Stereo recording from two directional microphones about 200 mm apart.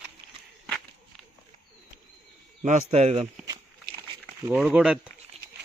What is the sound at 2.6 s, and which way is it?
Speech, 35° right (ahead or behind).